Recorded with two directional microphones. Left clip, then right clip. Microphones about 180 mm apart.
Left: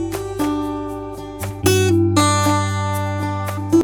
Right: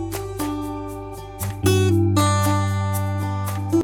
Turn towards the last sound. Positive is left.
turn(degrees=0)  # may be behind; listen again after turning